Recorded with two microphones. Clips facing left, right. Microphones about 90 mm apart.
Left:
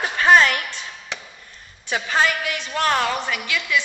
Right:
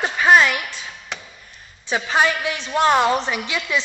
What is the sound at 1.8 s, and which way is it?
A woman's voice, 15° right (ahead or behind).